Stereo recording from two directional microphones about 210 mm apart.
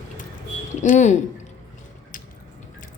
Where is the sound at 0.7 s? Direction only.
35° left (ahead or behind).